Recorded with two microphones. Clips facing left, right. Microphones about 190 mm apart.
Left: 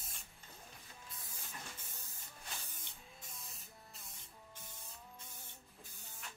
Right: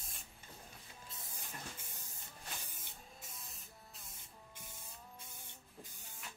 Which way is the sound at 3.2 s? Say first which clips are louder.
Right 1 dB; centre (ahead or behind).